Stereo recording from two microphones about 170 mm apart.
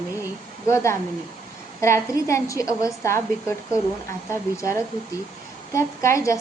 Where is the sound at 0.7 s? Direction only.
15° left (ahead or behind).